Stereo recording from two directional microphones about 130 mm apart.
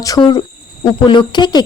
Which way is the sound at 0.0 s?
30° left (ahead or behind).